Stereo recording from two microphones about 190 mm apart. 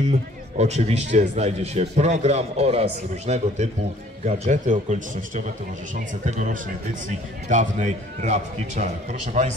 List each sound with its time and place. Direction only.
0.6 s a man's voice: 35° right (ahead or behind)